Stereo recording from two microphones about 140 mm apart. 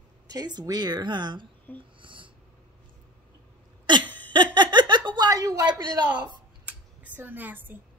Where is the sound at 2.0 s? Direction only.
35° right (ahead or behind).